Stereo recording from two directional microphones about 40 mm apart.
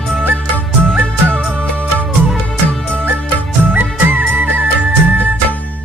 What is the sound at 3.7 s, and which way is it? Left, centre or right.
Music, right.